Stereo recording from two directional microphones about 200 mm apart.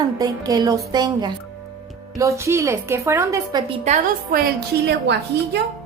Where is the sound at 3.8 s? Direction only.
40° right (ahead or behind).